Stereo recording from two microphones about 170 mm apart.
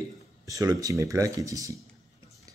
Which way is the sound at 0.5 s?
20° right (ahead or behind).